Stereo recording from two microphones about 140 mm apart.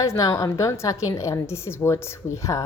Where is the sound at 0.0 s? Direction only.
25° left (ahead or behind).